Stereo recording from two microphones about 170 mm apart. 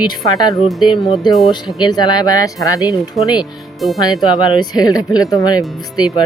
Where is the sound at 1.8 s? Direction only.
25° left (ahead or behind).